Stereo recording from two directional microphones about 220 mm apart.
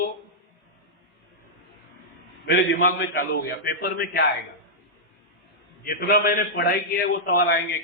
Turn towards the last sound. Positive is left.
turn(degrees=45)  # may be behind; listen again after turning